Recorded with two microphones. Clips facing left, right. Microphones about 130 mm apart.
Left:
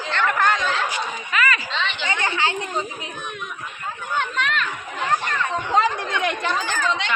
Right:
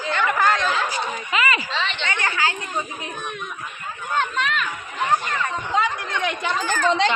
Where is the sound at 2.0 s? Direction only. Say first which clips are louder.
Left 2 dB; 20° left (ahead or behind).